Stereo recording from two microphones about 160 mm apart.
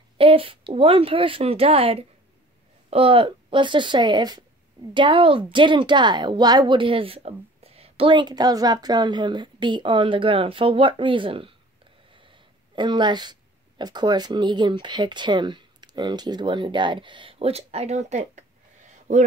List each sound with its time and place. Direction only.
0.2 s a woman's voice: 35° right (ahead or behind)